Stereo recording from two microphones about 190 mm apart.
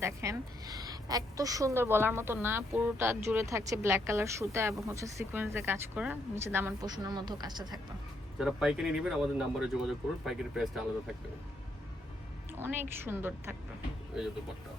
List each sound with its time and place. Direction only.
0.0 s a woman's voice: 15° right (ahead or behind)
8.4 s speech: centre (ahead or behind)
12.5 s a woman's voice: 10° right (ahead or behind)